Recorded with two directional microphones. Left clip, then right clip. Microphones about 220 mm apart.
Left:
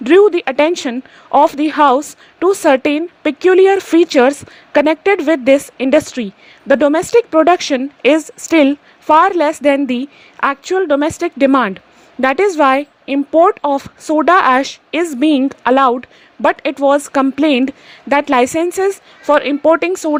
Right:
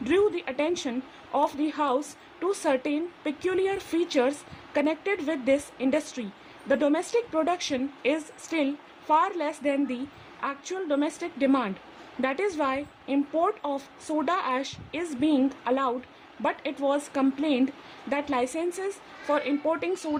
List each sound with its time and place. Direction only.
0.0 s speech: 30° left (ahead or behind)